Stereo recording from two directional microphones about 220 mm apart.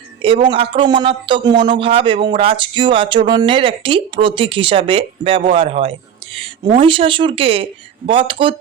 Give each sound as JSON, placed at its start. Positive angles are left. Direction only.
{"t": 0.2, "sound": "a man's voice", "side_deg": -25}